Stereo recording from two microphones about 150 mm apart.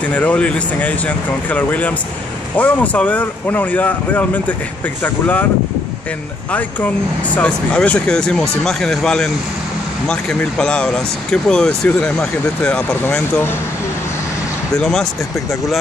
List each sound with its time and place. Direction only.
0.0 s speech: 10° left (ahead or behind)
7.3 s speech: 10° left (ahead or behind)
10.6 s speech: 5° left (ahead or behind)
14.8 s speech: 5° left (ahead or behind)